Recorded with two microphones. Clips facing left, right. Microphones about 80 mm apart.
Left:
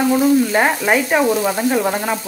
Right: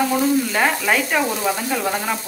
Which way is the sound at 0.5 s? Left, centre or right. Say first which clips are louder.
Left 3 dB; left.